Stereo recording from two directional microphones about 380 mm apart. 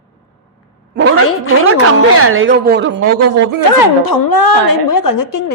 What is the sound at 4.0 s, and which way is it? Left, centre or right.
A woman's voice, left.